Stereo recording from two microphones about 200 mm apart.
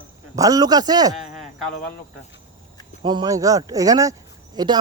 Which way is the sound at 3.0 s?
20° right (ahead or behind).